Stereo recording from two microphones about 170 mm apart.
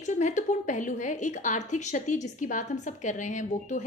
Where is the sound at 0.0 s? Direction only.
45° left (ahead or behind).